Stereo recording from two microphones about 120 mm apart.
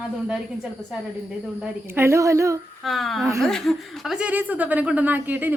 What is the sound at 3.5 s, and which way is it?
Speech, centre (ahead or behind).